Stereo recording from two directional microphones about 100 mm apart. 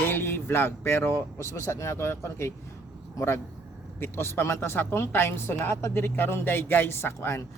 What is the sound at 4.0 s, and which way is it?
Speech, 25° left (ahead or behind).